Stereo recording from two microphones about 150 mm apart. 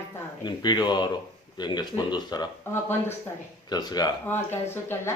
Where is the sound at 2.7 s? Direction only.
15° left (ahead or behind).